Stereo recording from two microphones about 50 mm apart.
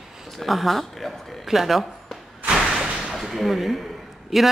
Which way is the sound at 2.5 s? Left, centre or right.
Centre.